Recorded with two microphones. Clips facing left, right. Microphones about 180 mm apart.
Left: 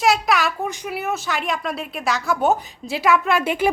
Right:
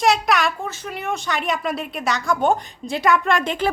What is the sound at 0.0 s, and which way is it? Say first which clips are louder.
A woman's voice: even; centre (ahead or behind).